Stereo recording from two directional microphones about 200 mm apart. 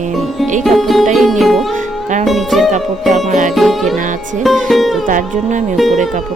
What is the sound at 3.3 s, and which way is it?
Speech, 40° right (ahead or behind).